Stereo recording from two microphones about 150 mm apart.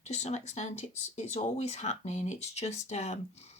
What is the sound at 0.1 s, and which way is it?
Speech, 45° left (ahead or behind).